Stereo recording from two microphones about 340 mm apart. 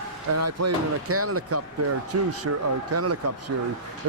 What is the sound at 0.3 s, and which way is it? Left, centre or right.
Speech, right.